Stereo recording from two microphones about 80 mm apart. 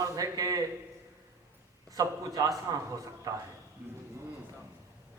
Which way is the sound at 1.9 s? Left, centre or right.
Right.